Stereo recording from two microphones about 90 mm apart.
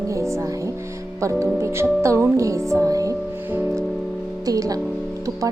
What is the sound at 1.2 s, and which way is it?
Speech, 35° right (ahead or behind).